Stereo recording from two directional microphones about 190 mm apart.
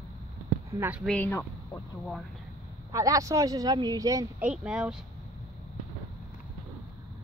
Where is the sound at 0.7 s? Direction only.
10° right (ahead or behind).